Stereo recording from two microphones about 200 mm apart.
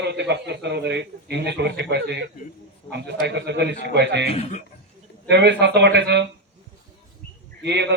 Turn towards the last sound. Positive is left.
turn(degrees=-60)  # may be behind; listen again after turning